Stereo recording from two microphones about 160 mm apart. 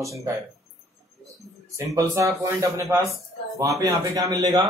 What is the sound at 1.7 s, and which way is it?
Speech, 20° right (ahead or behind).